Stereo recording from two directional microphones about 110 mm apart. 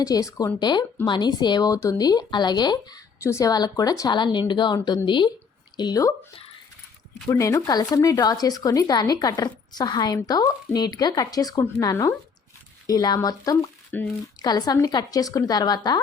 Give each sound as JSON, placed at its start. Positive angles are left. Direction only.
{"t": 0.0, "sound": "a woman's voice", "side_deg": 30}
{"t": 3.2, "sound": "a woman's voice", "side_deg": 30}
{"t": 4.1, "sound": "speech", "side_deg": 45}
{"t": 7.3, "sound": "a woman's voice", "side_deg": 25}
{"t": 13.9, "sound": "speech", "side_deg": 15}
{"t": 14.4, "sound": "a woman's voice", "side_deg": 35}